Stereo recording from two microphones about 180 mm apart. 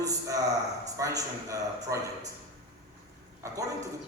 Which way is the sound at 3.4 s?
15° right (ahead or behind).